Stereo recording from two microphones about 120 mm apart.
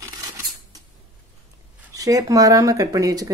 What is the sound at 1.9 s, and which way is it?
A woman's voice, 30° right (ahead or behind).